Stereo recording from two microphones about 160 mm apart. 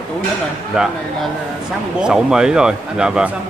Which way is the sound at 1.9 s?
5° right (ahead or behind).